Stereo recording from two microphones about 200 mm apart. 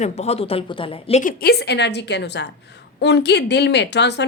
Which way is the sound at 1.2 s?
45° left (ahead or behind).